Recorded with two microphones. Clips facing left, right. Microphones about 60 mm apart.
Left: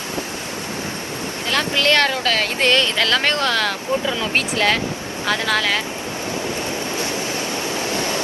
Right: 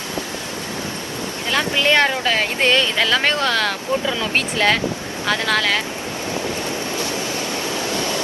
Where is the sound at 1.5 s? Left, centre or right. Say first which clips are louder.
Even; centre.